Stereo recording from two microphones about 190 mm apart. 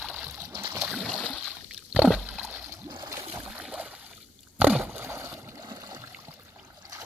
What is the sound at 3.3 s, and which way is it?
Boat, 5° right (ahead or behind).